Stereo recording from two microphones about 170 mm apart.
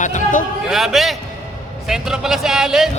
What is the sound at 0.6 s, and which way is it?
A man's voice, centre (ahead or behind).